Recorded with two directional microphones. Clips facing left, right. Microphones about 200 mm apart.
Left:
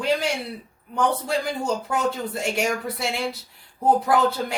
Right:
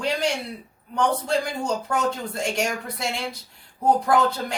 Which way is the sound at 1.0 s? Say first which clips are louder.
Right 1 dB; 5° left (ahead or behind).